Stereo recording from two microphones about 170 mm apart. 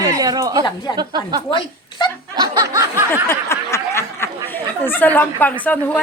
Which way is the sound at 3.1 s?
15° left (ahead or behind).